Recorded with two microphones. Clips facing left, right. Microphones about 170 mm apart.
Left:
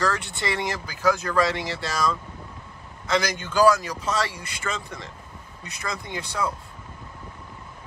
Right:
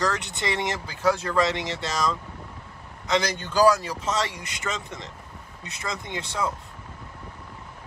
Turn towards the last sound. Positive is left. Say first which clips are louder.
# even
turn(degrees=-20)  # may be behind; listen again after turning